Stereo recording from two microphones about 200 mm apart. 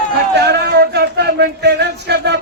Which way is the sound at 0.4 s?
55° right (ahead or behind).